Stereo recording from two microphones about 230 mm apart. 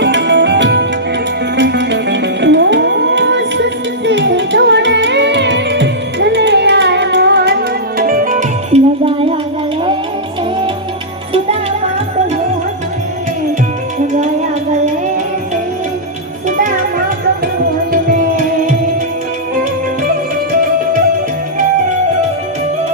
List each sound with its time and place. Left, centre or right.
0.0 s music: right